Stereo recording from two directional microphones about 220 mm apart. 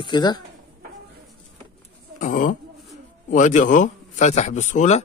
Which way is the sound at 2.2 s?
35° left (ahead or behind).